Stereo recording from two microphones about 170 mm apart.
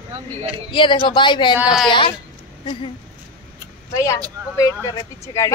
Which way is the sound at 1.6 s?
5° right (ahead or behind).